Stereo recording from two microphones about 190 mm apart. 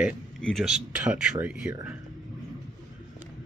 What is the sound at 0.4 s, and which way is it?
Speech, centre (ahead or behind).